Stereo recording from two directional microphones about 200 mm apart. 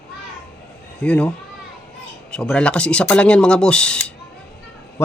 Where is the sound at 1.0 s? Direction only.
5° left (ahead or behind).